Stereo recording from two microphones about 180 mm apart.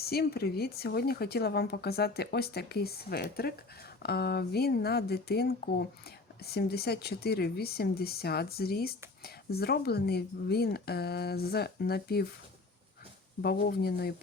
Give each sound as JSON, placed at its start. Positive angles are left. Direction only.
{"t": 0.0, "sound": "speech", "side_deg": 60}
{"t": 13.4, "sound": "speech", "side_deg": 60}